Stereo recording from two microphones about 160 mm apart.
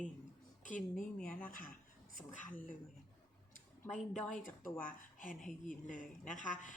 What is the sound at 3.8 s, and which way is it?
Speech, 5° left (ahead or behind).